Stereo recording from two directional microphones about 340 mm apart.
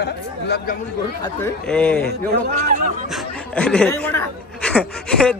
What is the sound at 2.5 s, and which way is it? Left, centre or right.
Speech, right.